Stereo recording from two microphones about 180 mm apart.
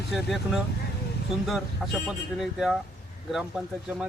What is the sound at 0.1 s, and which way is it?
A man's voice, centre (ahead or behind).